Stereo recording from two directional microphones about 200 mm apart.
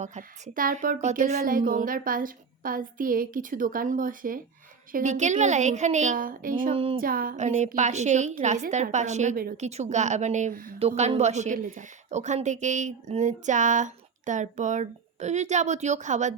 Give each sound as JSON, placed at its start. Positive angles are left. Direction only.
{"t": 0.0, "sound": "a woman's voice", "side_deg": -35}
{"t": 6.7, "sound": "speech", "side_deg": -30}
{"t": 7.0, "sound": "a woman's voice", "side_deg": -45}
{"t": 10.8, "sound": "a woman's voice", "side_deg": -30}